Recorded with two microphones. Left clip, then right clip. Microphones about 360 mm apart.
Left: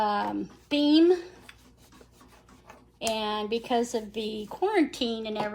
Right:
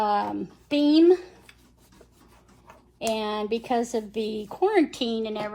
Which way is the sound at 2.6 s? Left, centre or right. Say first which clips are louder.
Right 2 dB; centre.